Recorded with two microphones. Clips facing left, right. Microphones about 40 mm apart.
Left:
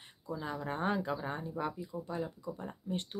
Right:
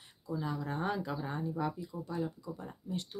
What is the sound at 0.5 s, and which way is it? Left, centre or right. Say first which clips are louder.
Speech: left 2 dB; left.